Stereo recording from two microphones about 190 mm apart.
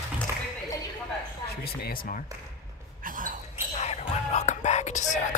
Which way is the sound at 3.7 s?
35° left (ahead or behind).